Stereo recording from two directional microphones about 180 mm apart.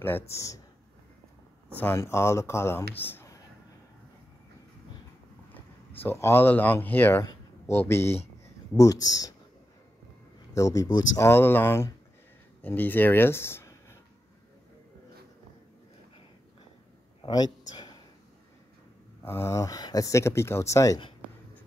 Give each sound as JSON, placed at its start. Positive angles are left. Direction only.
{"t": 0.0, "sound": "speech", "side_deg": 15}
{"t": 1.8, "sound": "speech", "side_deg": 15}
{"t": 5.5, "sound": "speech", "side_deg": 10}
{"t": 10.5, "sound": "speech", "side_deg": 20}
{"t": 17.2, "sound": "a sound", "side_deg": 20}
{"t": 19.2, "sound": "speech", "side_deg": 15}